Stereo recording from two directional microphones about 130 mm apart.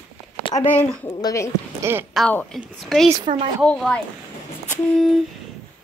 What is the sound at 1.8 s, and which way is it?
Speech, 15° right (ahead or behind).